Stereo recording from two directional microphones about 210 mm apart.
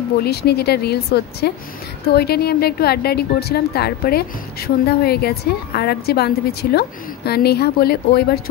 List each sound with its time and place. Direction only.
0.2 s a woman's voice: 50° left (ahead or behind)